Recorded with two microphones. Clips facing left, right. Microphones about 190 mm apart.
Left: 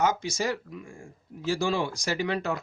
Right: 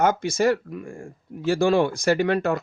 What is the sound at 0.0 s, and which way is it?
Speech, 55° right (ahead or behind).